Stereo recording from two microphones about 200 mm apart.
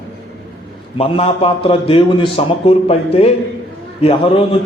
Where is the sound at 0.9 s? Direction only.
30° left (ahead or behind).